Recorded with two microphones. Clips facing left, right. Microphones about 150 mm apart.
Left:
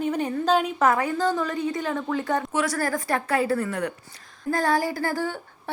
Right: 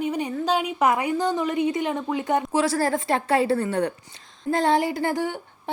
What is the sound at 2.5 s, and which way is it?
Speech, 30° right (ahead or behind).